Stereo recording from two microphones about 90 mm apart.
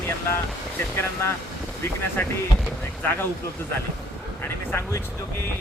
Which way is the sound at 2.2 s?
20° left (ahead or behind).